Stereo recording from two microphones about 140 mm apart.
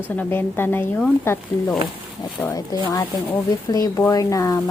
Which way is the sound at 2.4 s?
25° left (ahead or behind).